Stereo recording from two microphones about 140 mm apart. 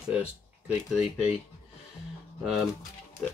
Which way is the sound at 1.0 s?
50° left (ahead or behind).